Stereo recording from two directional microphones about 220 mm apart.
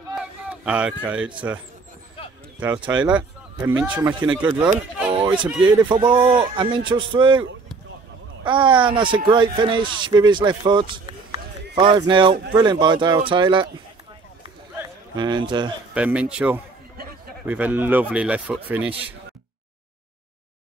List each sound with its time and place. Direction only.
0.1 s speech: 5° right (ahead or behind)
2.6 s speech: 5° right (ahead or behind)
5.1 s a sound: 20° right (ahead or behind)
5.6 s speech: 20° right (ahead or behind)
8.5 s speech: 20° right (ahead or behind)
15.1 s speech: 20° right (ahead or behind)
15.9 s speech: 5° right (ahead or behind)